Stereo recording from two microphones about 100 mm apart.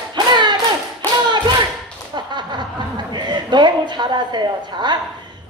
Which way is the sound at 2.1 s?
50° right (ahead or behind).